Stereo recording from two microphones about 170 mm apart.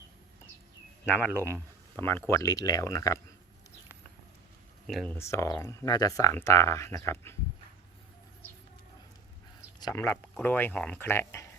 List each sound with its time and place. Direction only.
1.0 s speech: 10° left (ahead or behind)
4.9 s speech: centre (ahead or behind)
5.1 s speech: 15° left (ahead or behind)
9.8 s speech: 15° left (ahead or behind)